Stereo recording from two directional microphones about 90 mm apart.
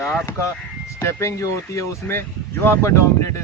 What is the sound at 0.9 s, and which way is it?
Speech, 35° left (ahead or behind).